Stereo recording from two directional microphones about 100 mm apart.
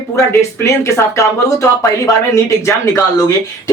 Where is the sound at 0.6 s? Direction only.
30° left (ahead or behind).